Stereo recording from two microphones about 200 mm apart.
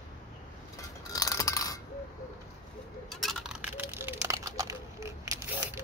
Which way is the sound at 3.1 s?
Centre (ahead or behind).